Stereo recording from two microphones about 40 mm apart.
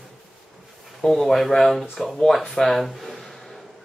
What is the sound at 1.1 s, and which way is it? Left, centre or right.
Speech, centre.